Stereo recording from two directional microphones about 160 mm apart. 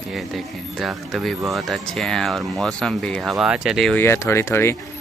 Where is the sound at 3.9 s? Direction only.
15° left (ahead or behind).